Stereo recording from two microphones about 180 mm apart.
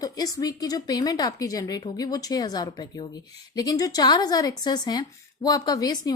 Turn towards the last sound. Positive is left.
turn(degrees=20)  # may be behind; listen again after turning